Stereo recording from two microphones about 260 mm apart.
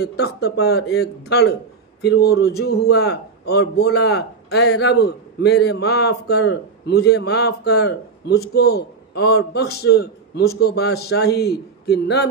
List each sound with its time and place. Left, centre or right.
0.0 s a man's voice: left